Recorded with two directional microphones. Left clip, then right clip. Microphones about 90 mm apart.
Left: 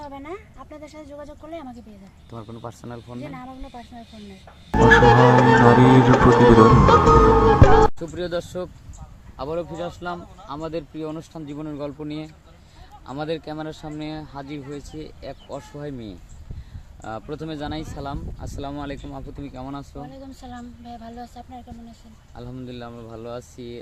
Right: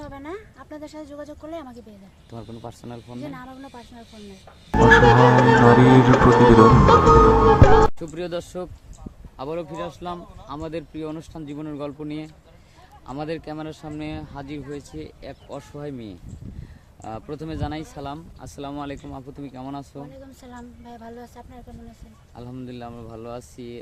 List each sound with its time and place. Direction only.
0.0 s speech: 35° right (ahead or behind)
2.6 s speech: 20° right (ahead or behind)
3.2 s a woman's voice: 40° right (ahead or behind)
3.6 s speech: 50° right (ahead or behind)
4.7 s music: centre (ahead or behind)
7.9 s speech: 10° right (ahead or behind)
20.5 s a woman's voice: 30° right (ahead or behind)
22.4 s speech: 10° right (ahead or behind)